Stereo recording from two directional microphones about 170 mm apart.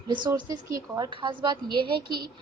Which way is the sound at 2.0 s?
65° right (ahead or behind).